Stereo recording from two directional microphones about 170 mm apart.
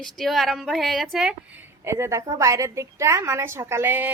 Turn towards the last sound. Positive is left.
turn(degrees=-10)  # may be behind; listen again after turning